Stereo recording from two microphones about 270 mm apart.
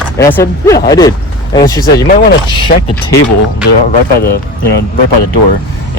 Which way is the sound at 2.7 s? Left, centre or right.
Left.